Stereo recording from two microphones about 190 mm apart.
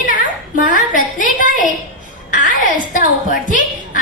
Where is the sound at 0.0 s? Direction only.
45° left (ahead or behind).